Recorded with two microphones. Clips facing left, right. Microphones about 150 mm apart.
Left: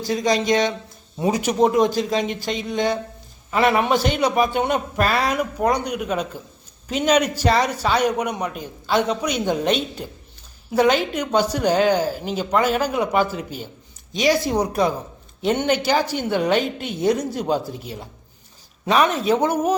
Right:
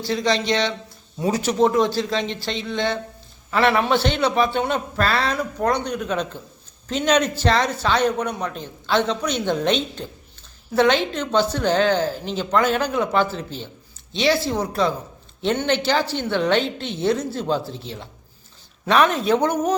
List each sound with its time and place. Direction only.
0.1 s a man's voice: 15° left (ahead or behind)